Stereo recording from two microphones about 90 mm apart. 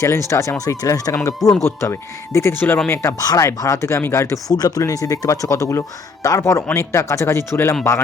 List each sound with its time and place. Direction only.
0.0 s speech: 35° left (ahead or behind)
4.5 s speech: 45° left (ahead or behind); by 7.8 s 30° left (ahead or behind)